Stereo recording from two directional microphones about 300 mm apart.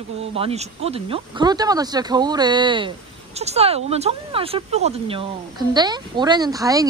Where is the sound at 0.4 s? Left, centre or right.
Centre.